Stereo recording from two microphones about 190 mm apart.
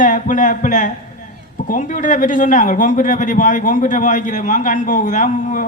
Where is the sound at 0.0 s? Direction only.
45° left (ahead or behind).